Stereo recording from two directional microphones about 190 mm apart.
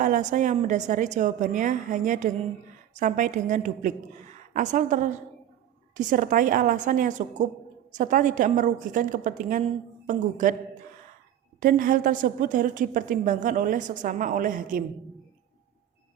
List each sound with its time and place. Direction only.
0.0 s a woman's voice: 40° right (ahead or behind)
11.6 s a woman's voice: 45° right (ahead or behind)